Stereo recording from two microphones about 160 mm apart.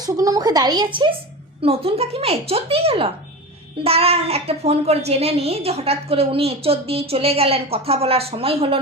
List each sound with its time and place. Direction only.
0.0 s a woman's voice: 25° right (ahead or behind)
1.6 s a child's voice: 35° right (ahead or behind)